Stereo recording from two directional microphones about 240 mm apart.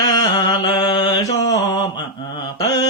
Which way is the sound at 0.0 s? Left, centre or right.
Centre.